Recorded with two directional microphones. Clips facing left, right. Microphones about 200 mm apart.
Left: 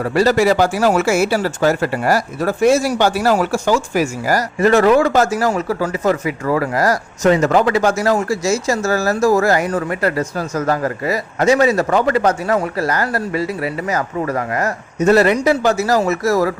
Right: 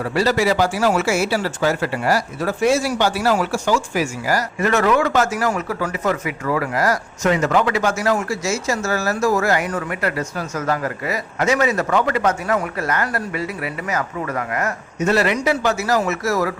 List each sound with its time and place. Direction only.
0.0 s speech: 45° left (ahead or behind)